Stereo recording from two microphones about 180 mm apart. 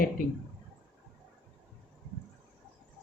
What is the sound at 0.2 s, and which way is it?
Speech, 50° left (ahead or behind).